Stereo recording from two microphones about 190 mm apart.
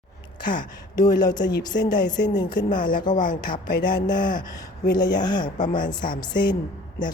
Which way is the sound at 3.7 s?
55° left (ahead or behind).